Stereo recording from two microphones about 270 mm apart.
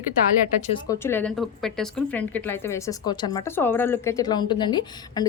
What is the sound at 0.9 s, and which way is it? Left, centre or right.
A woman's voice, centre.